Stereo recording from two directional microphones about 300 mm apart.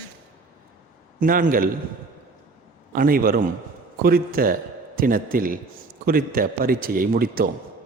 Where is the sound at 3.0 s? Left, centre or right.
Right.